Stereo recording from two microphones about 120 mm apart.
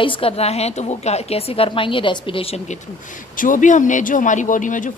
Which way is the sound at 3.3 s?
90° left.